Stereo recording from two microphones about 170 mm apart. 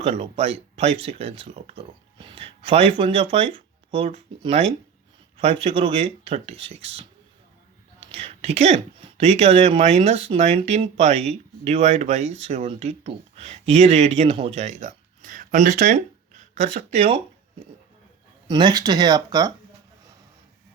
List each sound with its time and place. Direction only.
0.0 s speech: 40° right (ahead or behind)
8.1 s speech: 35° right (ahead or behind)
18.4 s speech: 25° right (ahead or behind)